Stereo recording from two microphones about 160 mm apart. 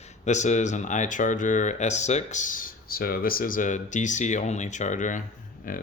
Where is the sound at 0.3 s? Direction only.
50° left (ahead or behind).